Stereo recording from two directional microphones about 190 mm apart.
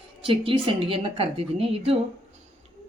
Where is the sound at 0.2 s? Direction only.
30° right (ahead or behind).